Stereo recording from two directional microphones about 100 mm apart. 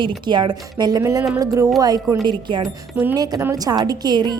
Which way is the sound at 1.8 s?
40° right (ahead or behind).